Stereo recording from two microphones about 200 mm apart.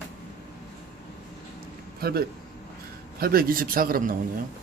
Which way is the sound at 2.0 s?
50° right (ahead or behind).